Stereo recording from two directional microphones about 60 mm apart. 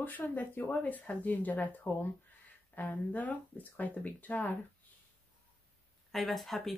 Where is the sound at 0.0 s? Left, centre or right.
Left.